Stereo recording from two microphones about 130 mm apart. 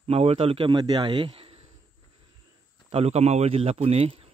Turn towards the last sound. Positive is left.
turn(degrees=-45)  # may be behind; listen again after turning